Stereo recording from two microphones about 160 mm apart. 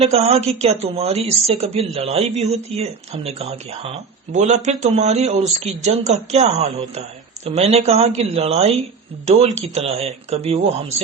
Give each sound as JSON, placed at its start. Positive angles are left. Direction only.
{"t": 0.0, "sound": "speech", "side_deg": -40}